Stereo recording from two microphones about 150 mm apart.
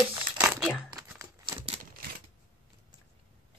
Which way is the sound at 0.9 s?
20° right (ahead or behind).